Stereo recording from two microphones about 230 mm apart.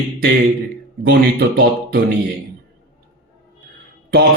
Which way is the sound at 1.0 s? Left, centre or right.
Right.